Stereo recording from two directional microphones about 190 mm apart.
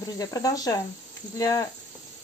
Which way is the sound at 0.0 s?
20° left (ahead or behind).